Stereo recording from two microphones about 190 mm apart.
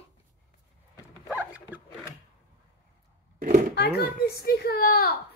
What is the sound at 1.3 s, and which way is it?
Dog, 10° right (ahead or behind).